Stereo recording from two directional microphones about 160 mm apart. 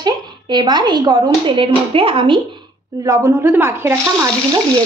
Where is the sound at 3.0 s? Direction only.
20° right (ahead or behind).